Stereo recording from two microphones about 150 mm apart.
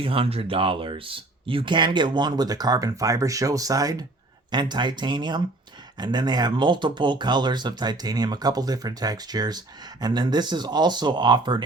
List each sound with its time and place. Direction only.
0.0 s speech: 40° right (ahead or behind)